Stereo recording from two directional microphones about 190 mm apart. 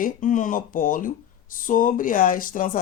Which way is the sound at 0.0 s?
40° left (ahead or behind).